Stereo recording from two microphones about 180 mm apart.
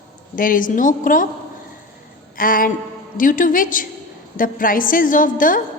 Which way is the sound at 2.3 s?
50° left (ahead or behind).